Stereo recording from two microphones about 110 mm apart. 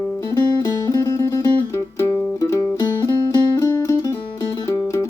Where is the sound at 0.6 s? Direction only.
30° left (ahead or behind).